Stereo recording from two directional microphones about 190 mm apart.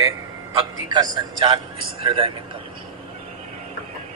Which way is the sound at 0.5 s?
25° right (ahead or behind).